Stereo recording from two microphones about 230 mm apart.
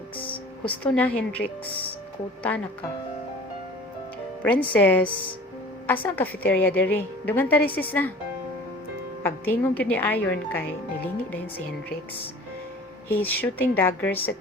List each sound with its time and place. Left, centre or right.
0.7 s a woman's voice: centre
4.4 s a woman's voice: centre
9.2 s a woman's voice: centre
13.1 s a woman's voice: centre